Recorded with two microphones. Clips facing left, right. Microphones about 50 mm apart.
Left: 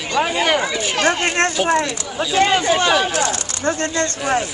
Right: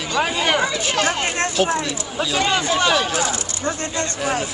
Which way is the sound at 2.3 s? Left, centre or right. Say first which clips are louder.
Left 5 dB; left.